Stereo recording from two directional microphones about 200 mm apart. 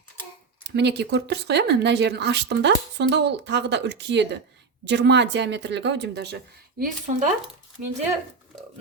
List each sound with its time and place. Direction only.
0.6 s speech: 60° right (ahead or behind); by 7.9 s 40° right (ahead or behind)